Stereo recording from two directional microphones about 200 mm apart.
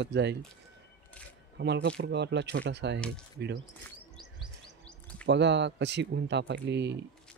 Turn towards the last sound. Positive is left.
turn(degrees=-60)  # may be behind; listen again after turning